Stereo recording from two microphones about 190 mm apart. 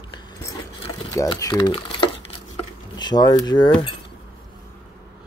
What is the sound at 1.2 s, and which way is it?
Speech, 15° left (ahead or behind).